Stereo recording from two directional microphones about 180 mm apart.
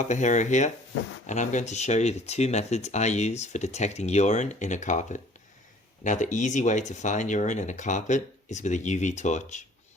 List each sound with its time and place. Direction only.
0.0 s speech: 40° left (ahead or behind)